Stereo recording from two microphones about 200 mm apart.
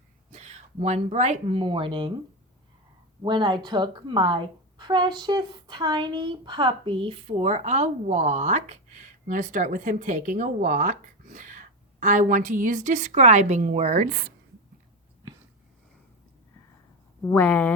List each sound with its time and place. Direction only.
0.3 s speech: 35° right (ahead or behind)
3.2 s speech: 20° right (ahead or behind); by 14.3 s 45° right (ahead or behind)
17.3 s speech: 10° left (ahead or behind)